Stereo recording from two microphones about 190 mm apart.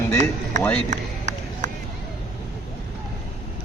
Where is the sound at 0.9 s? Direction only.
40° right (ahead or behind).